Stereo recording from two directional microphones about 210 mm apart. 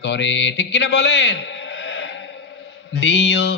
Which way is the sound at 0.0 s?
55° left (ahead or behind).